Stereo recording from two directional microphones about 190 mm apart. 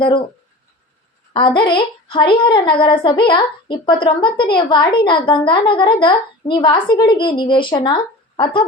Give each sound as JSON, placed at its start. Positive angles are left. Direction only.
{"t": 0.0, "sound": "a woman's voice", "side_deg": 25}
{"t": 1.3, "sound": "a woman's voice", "side_deg": 25}